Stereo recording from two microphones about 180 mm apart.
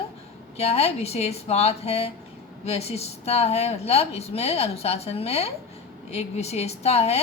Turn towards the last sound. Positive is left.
turn(degrees=35)  # may be behind; listen again after turning